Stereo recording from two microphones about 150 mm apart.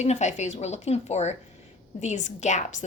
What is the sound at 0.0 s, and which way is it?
A woman's voice, 50° left (ahead or behind).